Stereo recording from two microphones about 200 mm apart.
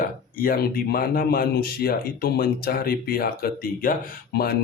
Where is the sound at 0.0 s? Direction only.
45° left (ahead or behind).